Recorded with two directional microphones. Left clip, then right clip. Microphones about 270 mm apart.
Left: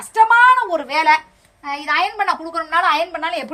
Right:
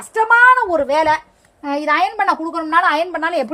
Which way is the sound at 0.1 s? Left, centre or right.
Centre.